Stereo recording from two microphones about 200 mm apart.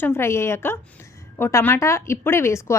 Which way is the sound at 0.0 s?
10° left (ahead or behind).